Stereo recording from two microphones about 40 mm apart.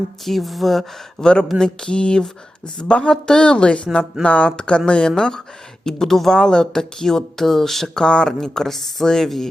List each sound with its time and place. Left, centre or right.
0.3 s speech: centre
1.2 s speech: left; by 8.0 s centre
8.0 s speech: left
8.3 s speech: centre